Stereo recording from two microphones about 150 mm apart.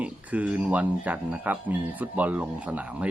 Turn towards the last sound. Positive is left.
turn(degrees=-10)  # may be behind; listen again after turning